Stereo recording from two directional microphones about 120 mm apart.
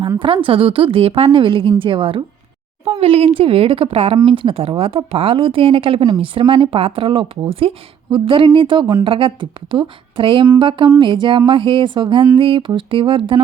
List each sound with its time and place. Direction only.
0.2 s speech: 45° right (ahead or behind)